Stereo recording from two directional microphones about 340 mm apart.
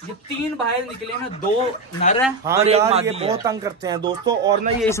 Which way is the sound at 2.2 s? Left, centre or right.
Centre.